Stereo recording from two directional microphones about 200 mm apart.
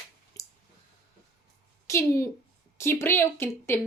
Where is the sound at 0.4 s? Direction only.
15° left (ahead or behind).